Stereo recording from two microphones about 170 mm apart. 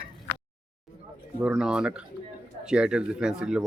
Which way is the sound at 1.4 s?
5° right (ahead or behind).